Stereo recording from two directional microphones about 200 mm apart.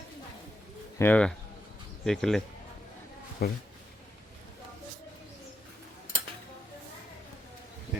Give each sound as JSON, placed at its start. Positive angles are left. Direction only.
{"t": 0.9, "sound": "speech", "side_deg": 10}
{"t": 3.4, "sound": "speech", "side_deg": 50}